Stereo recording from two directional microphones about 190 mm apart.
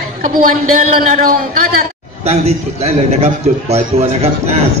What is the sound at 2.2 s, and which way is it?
A man's voice, 35° right (ahead or behind).